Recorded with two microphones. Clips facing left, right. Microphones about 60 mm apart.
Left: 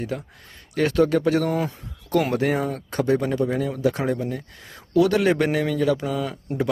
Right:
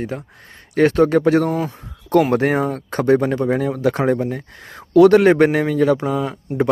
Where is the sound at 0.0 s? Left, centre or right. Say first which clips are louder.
Right 3 dB; right.